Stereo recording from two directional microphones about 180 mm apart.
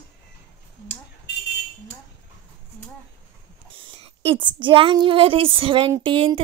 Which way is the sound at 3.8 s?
30° right (ahead or behind).